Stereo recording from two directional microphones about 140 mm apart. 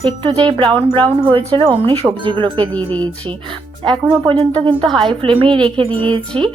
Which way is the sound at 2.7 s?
10° left (ahead or behind).